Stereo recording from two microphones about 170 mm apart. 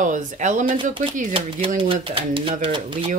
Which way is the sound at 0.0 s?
45° right (ahead or behind).